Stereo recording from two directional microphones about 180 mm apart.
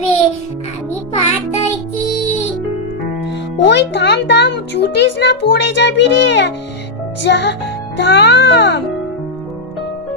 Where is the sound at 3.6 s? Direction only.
75° left (ahead or behind).